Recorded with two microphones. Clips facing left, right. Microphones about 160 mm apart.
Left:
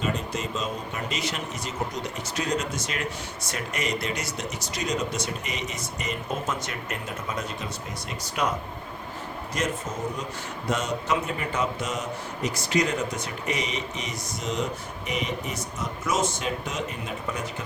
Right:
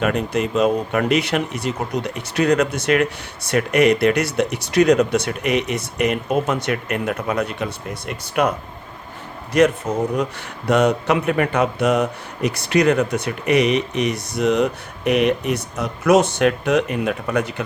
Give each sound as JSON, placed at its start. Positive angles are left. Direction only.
{"t": 0.0, "sound": "a man's voice", "side_deg": -65}